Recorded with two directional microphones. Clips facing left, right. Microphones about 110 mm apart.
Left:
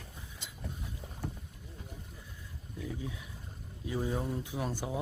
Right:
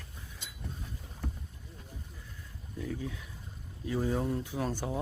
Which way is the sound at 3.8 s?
10° left (ahead or behind).